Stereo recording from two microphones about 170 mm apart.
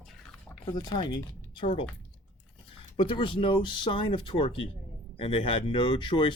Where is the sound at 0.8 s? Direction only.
25° left (ahead or behind).